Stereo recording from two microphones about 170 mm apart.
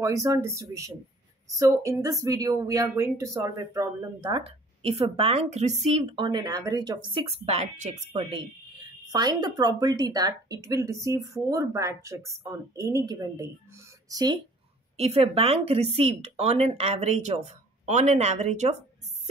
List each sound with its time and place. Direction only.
0.0 s speech: 20° right (ahead or behind)
15.0 s speech: 35° right (ahead or behind)